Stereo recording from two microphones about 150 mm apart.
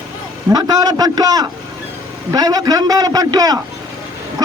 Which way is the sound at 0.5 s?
25° right (ahead or behind).